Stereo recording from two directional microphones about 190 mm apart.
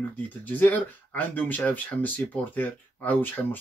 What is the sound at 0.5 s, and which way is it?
Speech, 10° left (ahead or behind).